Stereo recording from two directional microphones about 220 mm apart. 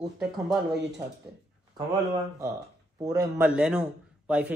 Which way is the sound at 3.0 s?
15° right (ahead or behind).